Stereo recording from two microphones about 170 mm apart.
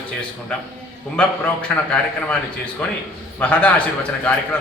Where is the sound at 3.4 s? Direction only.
10° left (ahead or behind).